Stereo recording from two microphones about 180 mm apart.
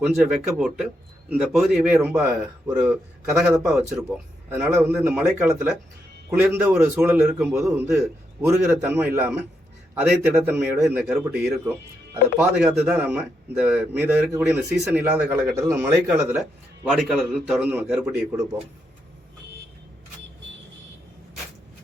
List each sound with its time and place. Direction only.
0.3 s a man's voice: centre (ahead or behind)
2.6 s a man's voice: 20° right (ahead or behind); by 4.0 s centre (ahead or behind)
4.4 s a man's voice: 15° right (ahead or behind)